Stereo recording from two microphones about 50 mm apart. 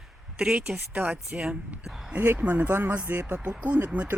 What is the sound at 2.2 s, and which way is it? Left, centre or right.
Speech, right.